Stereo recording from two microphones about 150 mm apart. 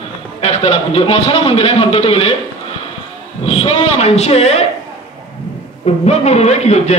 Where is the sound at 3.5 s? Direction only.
40° left (ahead or behind).